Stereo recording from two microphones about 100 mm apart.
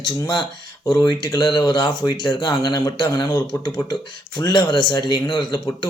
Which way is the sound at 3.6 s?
45° left (ahead or behind).